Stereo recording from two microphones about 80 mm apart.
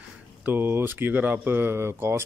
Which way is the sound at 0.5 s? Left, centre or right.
Right.